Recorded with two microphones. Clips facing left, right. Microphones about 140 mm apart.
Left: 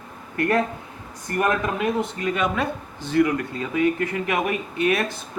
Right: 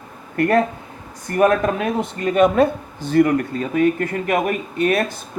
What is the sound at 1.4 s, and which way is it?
Speech, 60° right (ahead or behind).